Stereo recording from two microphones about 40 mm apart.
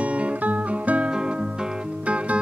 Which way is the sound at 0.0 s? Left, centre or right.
Right.